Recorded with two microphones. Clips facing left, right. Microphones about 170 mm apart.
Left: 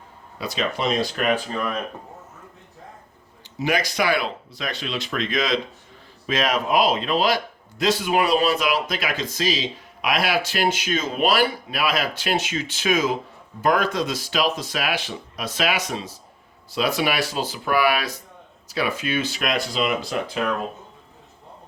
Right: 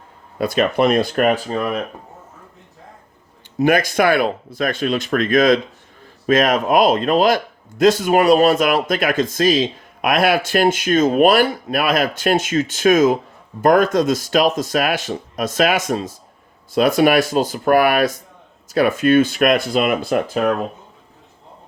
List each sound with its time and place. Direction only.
0.3 s speech: 55° right (ahead or behind)
1.5 s speech: 30° right (ahead or behind)
3.6 s speech: 50° right (ahead or behind)